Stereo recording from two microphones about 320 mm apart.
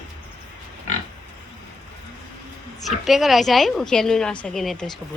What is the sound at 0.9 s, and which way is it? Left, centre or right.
Pig, left.